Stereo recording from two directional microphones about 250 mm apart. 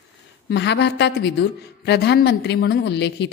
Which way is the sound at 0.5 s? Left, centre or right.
Left.